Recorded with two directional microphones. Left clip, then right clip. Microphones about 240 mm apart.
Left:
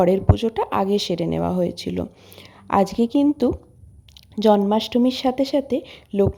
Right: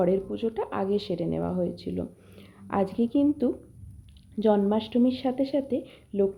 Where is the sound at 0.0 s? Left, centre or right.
Left.